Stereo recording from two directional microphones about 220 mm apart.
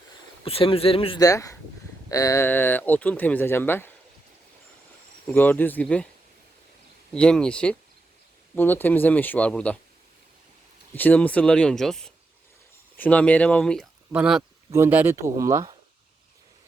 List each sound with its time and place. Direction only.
0.4 s speech: 25° left (ahead or behind); by 3.9 s 10° left (ahead or behind)
5.2 s speech: 10° left (ahead or behind)
7.1 s speech: 5° left (ahead or behind)
10.9 s speech: 10° left (ahead or behind); by 15.7 s 15° right (ahead or behind)